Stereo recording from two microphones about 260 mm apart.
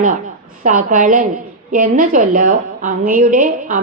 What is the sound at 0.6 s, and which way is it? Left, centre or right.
A woman's voice, right.